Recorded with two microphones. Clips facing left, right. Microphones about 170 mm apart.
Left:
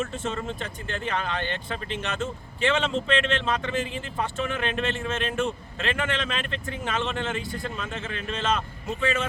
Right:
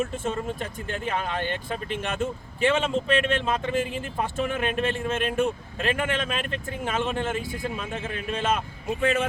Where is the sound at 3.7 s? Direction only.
50° right (ahead or behind).